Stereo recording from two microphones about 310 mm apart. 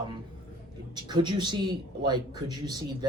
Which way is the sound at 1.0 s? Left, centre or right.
Centre.